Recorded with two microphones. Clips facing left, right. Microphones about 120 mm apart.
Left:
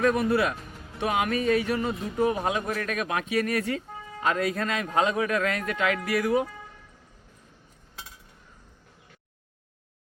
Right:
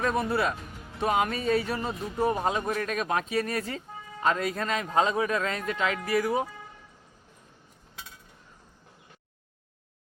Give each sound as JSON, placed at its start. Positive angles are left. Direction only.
{"t": 0.0, "sound": "speech", "side_deg": -25}